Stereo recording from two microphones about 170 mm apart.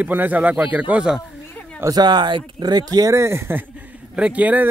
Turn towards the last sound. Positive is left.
turn(degrees=-10)  # may be behind; listen again after turning